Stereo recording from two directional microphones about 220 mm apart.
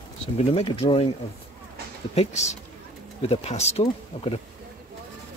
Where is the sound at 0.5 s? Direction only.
25° left (ahead or behind).